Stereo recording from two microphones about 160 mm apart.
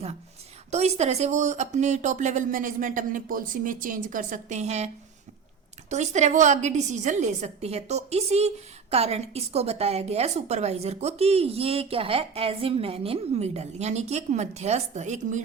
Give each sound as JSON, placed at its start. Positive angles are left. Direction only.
{"t": 0.7, "sound": "speech", "side_deg": -45}
{"t": 5.9, "sound": "a woman's voice", "side_deg": -45}